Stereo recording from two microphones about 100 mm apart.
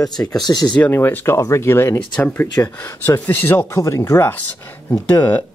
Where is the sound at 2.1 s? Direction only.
15° left (ahead or behind).